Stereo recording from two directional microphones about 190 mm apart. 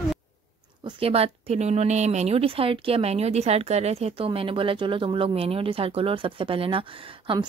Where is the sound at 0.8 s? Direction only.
30° right (ahead or behind).